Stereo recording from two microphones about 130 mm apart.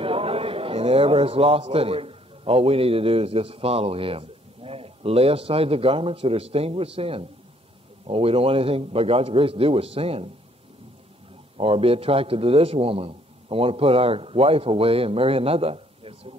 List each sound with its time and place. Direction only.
0.0 s a man's voice: 45° right (ahead or behind)
11.5 s a man's voice: 45° right (ahead or behind)